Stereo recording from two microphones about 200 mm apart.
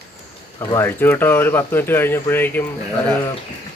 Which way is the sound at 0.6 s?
15° left (ahead or behind).